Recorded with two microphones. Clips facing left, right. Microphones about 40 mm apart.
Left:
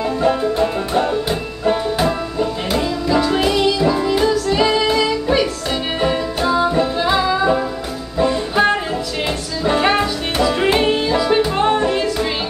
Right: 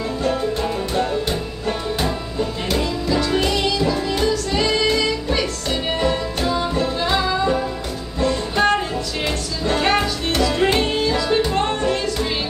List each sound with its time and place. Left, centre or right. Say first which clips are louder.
0.2 s music: left 5 dB; centre